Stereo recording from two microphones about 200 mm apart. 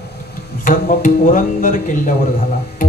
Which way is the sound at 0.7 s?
40° left (ahead or behind).